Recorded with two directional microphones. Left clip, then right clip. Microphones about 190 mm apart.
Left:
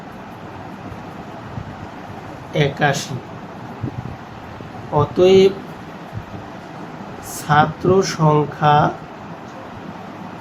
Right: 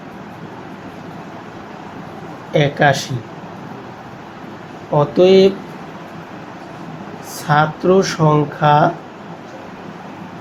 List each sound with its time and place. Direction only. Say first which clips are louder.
2.5 s speech: right 4 dB; 25° right (ahead or behind)
4.9 s speech: right 2 dB; 20° right (ahead or behind)
7.4 s speech: right 1 dB; 25° right (ahead or behind)